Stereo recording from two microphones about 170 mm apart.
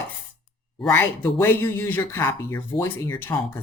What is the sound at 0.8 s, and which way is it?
Speech, 10° left (ahead or behind).